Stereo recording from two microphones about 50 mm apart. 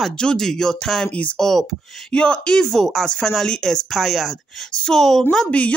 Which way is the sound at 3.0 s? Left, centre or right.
Centre.